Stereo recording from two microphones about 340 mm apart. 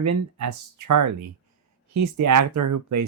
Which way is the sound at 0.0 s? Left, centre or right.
Right.